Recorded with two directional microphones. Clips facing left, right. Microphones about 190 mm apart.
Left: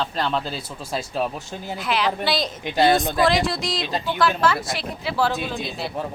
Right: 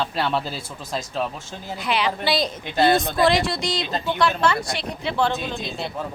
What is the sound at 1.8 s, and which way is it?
Speech, centre (ahead or behind).